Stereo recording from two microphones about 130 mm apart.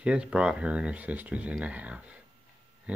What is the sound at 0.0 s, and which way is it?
Speech, 10° right (ahead or behind).